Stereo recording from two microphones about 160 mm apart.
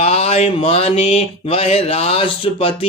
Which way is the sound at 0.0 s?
40° left (ahead or behind).